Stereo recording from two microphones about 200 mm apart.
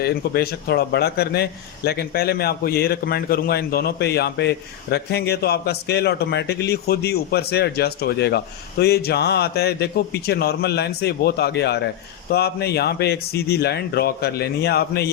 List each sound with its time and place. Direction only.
0.0 s a man's voice: 50° left (ahead or behind)